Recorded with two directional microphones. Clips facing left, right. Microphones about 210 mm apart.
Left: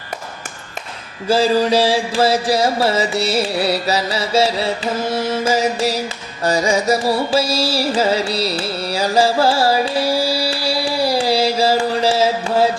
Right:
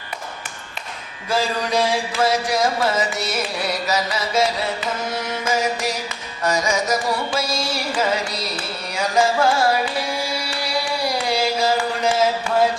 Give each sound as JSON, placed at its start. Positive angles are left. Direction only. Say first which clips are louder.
{"t": 1.3, "sound": "mantra", "louder": "left 7 dB", "side_deg": 30}
{"t": 6.4, "sound": "carnatic music", "louder": "left 5 dB", "side_deg": 30}